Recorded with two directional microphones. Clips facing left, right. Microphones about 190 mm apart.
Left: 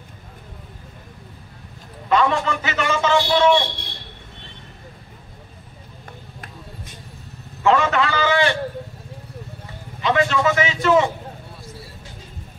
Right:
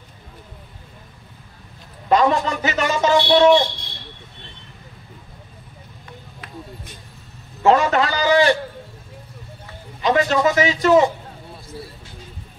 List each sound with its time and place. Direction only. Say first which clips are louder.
2.0 s a man's voice: right 2 dB; 40° right (ahead or behind)
7.6 s a man's voice: right 2 dB; 40° right (ahead or behind)
10.0 s a man's voice: right 1 dB; 40° right (ahead or behind)